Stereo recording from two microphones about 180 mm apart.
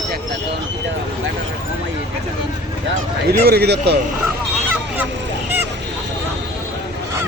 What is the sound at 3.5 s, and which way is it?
Speech, 65° right (ahead or behind).